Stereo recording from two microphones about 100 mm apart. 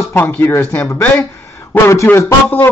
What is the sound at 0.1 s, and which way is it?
A man's voice, 25° left (ahead or behind).